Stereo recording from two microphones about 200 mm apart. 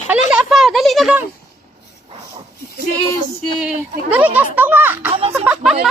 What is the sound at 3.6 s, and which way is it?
Speech, 5° right (ahead or behind).